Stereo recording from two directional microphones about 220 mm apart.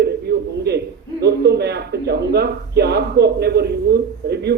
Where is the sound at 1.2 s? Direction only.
50° right (ahead or behind).